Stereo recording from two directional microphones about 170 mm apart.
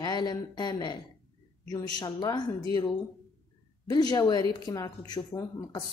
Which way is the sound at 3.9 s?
25° left (ahead or behind).